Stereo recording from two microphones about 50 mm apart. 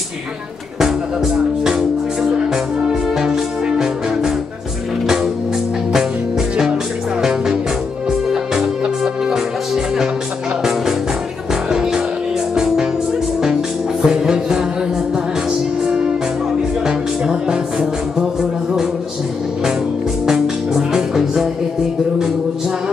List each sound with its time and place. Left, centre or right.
0.7 s speech: centre
2.3 s music: centre
7.2 s music: centre
12.5 s music: centre
14.0 s music: centre
15.8 s music: centre
20.2 s music: centre